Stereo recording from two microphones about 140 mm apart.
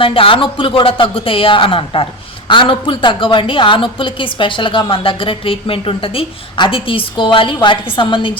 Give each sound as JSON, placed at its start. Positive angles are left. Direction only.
{"t": 0.0, "sound": "a woman's voice", "side_deg": 40}